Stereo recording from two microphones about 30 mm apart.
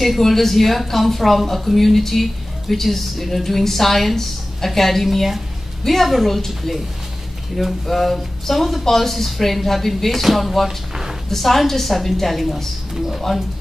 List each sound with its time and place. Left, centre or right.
0.2 s a woman's voice: centre
7.8 s a woman's voice: centre
13.3 s speech: centre